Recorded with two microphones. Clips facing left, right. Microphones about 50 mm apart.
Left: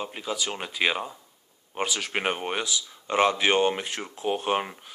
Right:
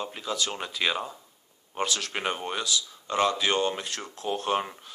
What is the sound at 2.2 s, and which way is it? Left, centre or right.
Speech, left.